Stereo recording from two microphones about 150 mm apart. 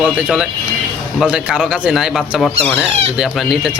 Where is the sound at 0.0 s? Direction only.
10° right (ahead or behind).